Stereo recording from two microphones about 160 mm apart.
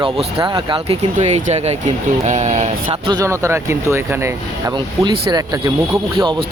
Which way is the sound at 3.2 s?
20° right (ahead or behind).